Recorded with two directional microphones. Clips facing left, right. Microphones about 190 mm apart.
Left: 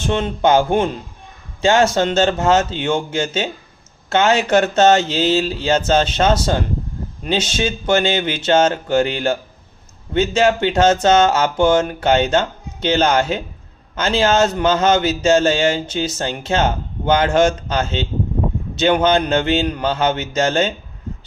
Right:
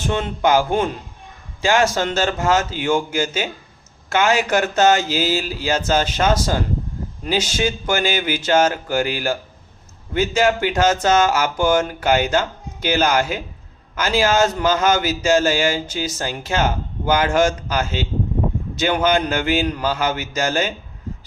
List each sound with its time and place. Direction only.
0.1 s speech: 25° left (ahead or behind)